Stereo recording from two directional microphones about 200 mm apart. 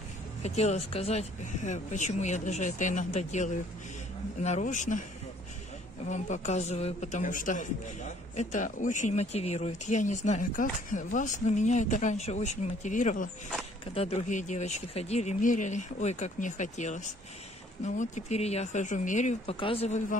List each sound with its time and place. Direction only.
0.4 s speech: 35° left (ahead or behind)
6.0 s speech: 35° left (ahead or behind)
19.5 s speech: 25° left (ahead or behind)